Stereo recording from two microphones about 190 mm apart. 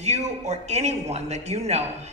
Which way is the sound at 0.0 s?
35° right (ahead or behind).